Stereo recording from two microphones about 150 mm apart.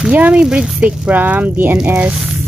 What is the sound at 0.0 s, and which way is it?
Speech, 10° right (ahead or behind).